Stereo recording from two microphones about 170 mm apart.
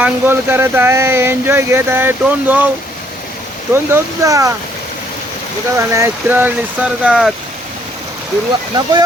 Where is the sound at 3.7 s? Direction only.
15° right (ahead or behind).